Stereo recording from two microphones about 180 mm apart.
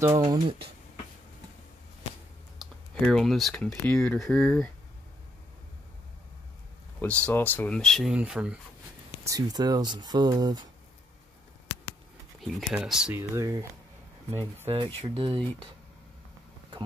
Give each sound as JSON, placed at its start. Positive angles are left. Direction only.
{"t": 0.0, "sound": "speech", "side_deg": -20}
{"t": 2.6, "sound": "speech", "side_deg": 5}
{"t": 7.0, "sound": "speech", "side_deg": 5}
{"t": 9.2, "sound": "speech", "side_deg": -20}
{"t": 12.4, "sound": "speech", "side_deg": 0}
{"t": 13.4, "sound": "speech", "side_deg": -15}
{"t": 15.1, "sound": "speech", "side_deg": -25}